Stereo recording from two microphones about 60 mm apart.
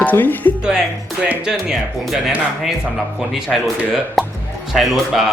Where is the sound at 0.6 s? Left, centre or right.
Centre.